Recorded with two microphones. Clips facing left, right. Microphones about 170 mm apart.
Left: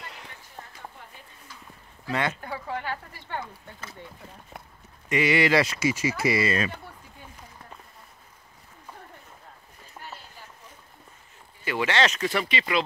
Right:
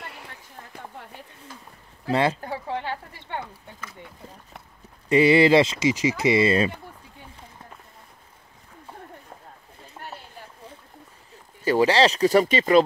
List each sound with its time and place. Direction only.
0.7 s a sound: 65° right (ahead or behind)
2.0 s speech: 30° right (ahead or behind)
5.1 s speech: 30° right (ahead or behind)
11.6 s speech: 35° right (ahead or behind)